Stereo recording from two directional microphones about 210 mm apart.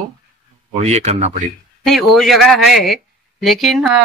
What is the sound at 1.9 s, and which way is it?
Speech, centre (ahead or behind).